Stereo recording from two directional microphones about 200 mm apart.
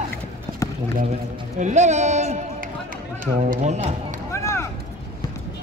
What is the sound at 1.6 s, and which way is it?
A man's voice, 35° right (ahead or behind).